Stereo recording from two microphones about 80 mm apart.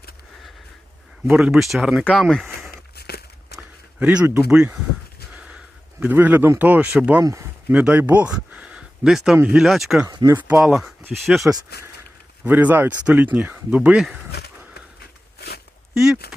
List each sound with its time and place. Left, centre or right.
1.3 s speech: centre
2.1 s speech: centre
4.0 s speech: centre
6.0 s a man's voice: right
7.2 s speech: right
7.7 s speech: centre
10.2 s speech: right
10.6 s speech: centre
12.5 s a man's voice: right